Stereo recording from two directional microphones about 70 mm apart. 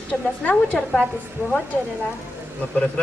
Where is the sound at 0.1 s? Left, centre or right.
Left.